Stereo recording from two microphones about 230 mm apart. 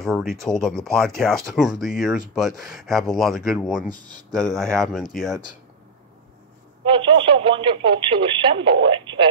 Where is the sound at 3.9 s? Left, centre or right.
Centre.